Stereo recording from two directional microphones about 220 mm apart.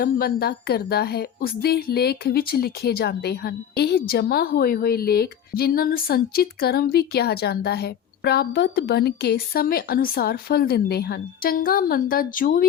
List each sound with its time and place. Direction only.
0.0 s speech: 45° left (ahead or behind)